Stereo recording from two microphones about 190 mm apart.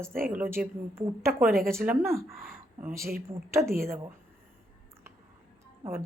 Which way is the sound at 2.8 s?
15° right (ahead or behind).